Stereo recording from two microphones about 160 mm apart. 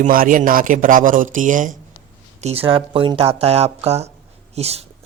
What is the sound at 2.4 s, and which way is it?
Speech, 35° right (ahead or behind).